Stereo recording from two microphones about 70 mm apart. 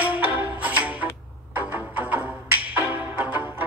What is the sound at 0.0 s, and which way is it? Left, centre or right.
Music, right.